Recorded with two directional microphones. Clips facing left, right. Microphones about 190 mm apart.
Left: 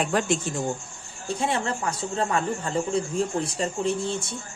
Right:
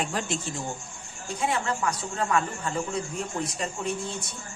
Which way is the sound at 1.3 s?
30° left (ahead or behind).